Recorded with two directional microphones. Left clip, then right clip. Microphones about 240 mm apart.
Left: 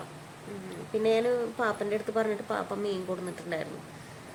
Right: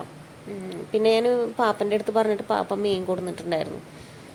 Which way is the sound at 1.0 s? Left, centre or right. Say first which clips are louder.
Right 6 dB; right.